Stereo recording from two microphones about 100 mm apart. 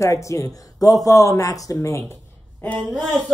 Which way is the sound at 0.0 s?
30° left (ahead or behind).